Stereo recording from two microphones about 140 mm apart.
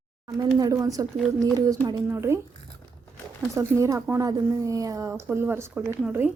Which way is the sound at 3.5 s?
20° right (ahead or behind).